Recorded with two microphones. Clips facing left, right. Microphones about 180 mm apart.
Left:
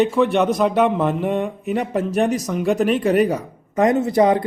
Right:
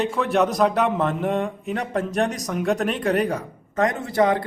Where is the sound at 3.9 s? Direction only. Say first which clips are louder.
Left 6 dB; 20° left (ahead or behind).